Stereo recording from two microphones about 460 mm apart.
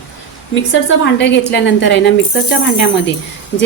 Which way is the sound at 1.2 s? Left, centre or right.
Left.